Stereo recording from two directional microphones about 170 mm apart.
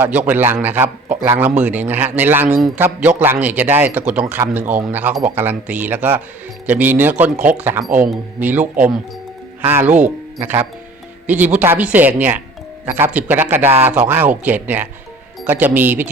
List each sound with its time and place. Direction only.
0.0 s a man's voice: 10° right (ahead or behind)
2.6 s a man's voice: centre (ahead or behind)
7.9 s speech: 50° right (ahead or behind)
8.1 s a man's voice: 10° right (ahead or behind)